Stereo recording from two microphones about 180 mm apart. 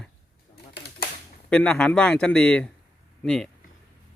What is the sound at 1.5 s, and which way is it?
Speech, 5° left (ahead or behind).